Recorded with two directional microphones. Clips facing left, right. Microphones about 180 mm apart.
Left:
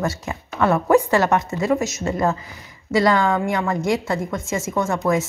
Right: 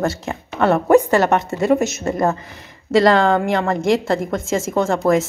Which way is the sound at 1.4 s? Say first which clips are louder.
Right 4 dB; 30° right (ahead or behind).